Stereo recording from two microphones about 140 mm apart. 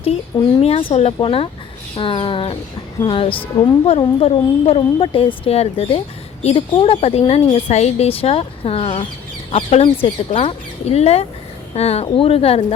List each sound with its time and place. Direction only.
0.6 s speech: 40° left (ahead or behind)
2.0 s a sound: 40° left (ahead or behind)
3.8 s speech: 45° left (ahead or behind)